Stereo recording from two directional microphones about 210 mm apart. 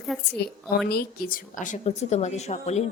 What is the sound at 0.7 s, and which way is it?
A woman's voice, 45° left (ahead or behind).